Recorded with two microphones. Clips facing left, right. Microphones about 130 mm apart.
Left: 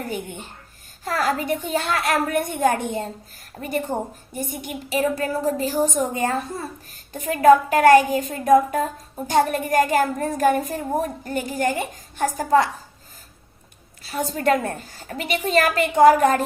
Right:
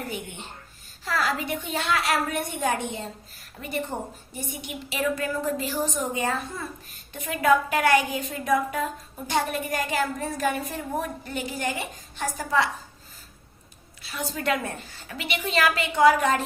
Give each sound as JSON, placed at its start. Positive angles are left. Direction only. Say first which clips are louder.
{"t": 0.1, "sound": "a woman's voice", "louder": "left 5 dB", "side_deg": 45}
{"t": 14.0, "sound": "a woman's voice", "louder": "left 7 dB", "side_deg": 40}